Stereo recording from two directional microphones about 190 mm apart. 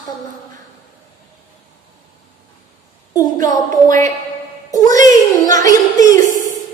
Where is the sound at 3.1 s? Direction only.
20° left (ahead or behind).